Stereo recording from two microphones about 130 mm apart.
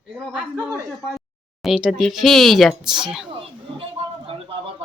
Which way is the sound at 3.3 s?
45° right (ahead or behind).